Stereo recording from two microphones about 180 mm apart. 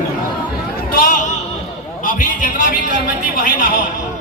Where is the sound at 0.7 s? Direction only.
55° left (ahead or behind).